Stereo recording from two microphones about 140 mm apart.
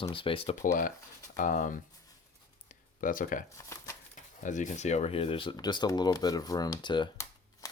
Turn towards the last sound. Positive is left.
turn(degrees=25)  # may be behind; listen again after turning